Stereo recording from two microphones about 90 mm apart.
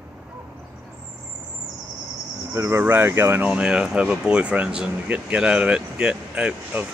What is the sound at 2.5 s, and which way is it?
Speech, 30° right (ahead or behind).